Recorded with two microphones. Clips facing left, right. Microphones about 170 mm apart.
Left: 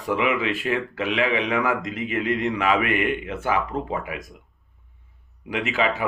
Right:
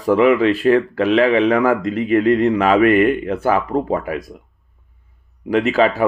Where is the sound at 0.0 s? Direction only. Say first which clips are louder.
Right 10 dB; 35° right (ahead or behind).